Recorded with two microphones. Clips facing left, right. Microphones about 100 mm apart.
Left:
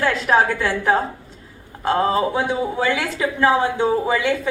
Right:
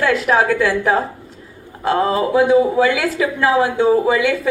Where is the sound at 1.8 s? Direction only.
30° left (ahead or behind).